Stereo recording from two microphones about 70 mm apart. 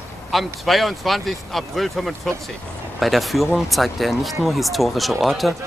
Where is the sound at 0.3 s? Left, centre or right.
Centre.